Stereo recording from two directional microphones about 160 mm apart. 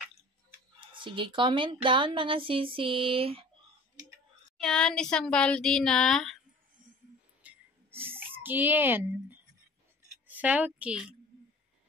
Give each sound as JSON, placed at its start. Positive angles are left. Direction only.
{"t": 0.7, "sound": "a woman's voice", "side_deg": -30}
{"t": 4.6, "sound": "speech", "side_deg": 5}
{"t": 7.4, "sound": "a sound", "side_deg": -15}
{"t": 10.2, "sound": "a woman's voice", "side_deg": -10}